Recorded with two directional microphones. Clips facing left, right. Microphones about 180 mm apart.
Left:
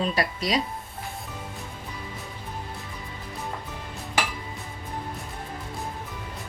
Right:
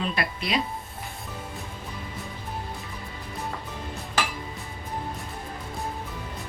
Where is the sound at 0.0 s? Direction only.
35° left (ahead or behind).